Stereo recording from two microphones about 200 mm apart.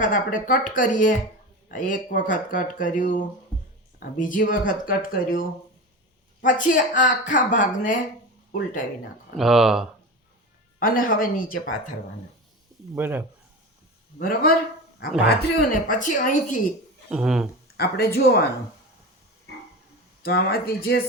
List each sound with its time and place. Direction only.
0.0 s speech: 40° left (ahead or behind)
9.4 s speech: centre (ahead or behind)
10.8 s speech: 45° left (ahead or behind)
13.0 s speech: 10° right (ahead or behind)
14.2 s speech: 45° left (ahead or behind)
17.1 s speech: 5° right (ahead or behind)
17.7 s speech: 50° left (ahead or behind)
20.2 s speech: 50° left (ahead or behind)